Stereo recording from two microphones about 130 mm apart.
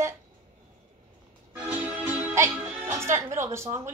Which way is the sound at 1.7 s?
15° right (ahead or behind).